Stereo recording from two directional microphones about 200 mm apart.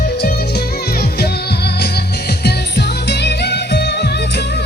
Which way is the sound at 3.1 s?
55° left (ahead or behind).